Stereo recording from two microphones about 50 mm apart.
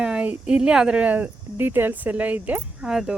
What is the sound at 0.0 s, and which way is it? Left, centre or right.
A woman's voice, right.